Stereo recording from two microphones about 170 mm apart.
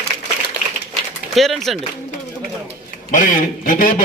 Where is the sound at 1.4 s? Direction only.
Centre (ahead or behind).